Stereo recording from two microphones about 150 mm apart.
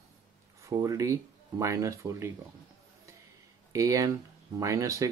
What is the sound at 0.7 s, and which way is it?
Speech, 20° right (ahead or behind).